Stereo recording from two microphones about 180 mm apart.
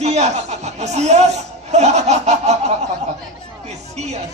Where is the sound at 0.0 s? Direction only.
40° right (ahead or behind).